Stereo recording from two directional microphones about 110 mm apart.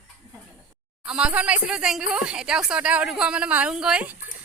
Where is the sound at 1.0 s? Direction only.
10° right (ahead or behind).